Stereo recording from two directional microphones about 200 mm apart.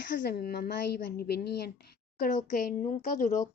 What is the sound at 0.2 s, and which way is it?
A woman's voice, 50° left (ahead or behind).